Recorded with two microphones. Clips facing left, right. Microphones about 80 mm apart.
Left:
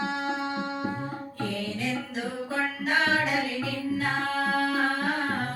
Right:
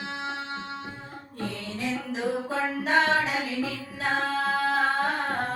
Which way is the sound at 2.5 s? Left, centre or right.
Right.